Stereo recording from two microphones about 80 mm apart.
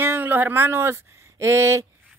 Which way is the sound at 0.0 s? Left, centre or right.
Right.